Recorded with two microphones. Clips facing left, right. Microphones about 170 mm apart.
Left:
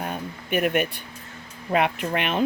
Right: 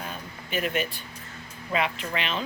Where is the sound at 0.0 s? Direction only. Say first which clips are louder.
Left 6 dB; 55° left (ahead or behind).